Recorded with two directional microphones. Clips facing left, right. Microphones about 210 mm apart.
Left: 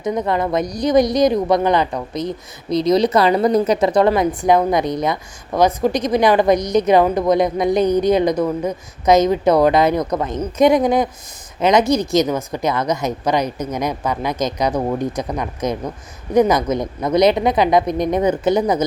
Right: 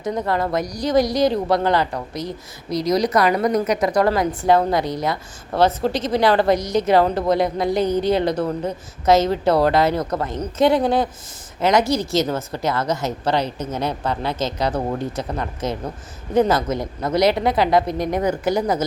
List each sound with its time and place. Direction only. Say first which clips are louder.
0.0 s a woman's voice: left 3 dB; 20° left (ahead or behind)